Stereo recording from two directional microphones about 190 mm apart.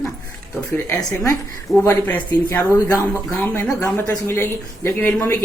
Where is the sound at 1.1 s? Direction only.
15° left (ahead or behind).